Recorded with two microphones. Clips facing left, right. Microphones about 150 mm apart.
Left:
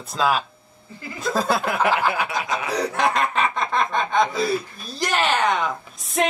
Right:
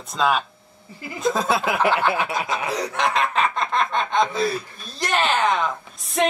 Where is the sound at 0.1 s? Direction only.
Centre (ahead or behind).